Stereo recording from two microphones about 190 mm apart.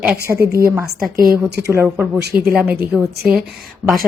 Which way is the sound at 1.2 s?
55° right (ahead or behind).